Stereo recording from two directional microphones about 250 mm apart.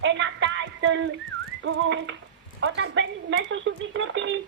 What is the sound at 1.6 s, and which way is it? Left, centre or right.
A woman's voice, right.